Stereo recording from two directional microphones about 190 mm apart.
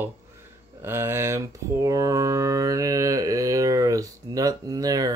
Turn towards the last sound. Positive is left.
turn(degrees=-20)  # may be behind; listen again after turning